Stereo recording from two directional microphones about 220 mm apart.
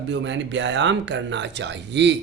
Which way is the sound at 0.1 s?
55° right (ahead or behind).